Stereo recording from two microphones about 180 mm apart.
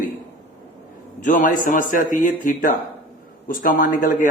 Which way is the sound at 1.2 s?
45° left (ahead or behind).